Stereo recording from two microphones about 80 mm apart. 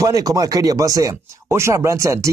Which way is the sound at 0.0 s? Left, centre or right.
Right.